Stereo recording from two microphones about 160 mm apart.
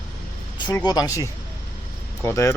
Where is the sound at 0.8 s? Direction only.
25° left (ahead or behind).